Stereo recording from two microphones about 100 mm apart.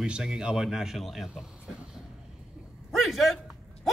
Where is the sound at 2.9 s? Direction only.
Centre (ahead or behind).